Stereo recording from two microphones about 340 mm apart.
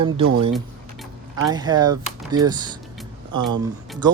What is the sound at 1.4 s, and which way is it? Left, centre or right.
Speech, centre.